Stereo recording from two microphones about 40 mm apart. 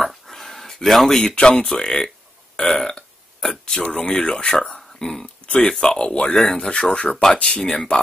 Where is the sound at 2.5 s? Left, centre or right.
Left.